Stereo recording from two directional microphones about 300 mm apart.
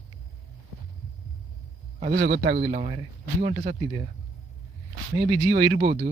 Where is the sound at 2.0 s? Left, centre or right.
Right.